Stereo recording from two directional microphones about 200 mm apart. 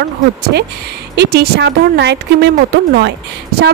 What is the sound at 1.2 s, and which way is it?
Speech, 55° right (ahead or behind).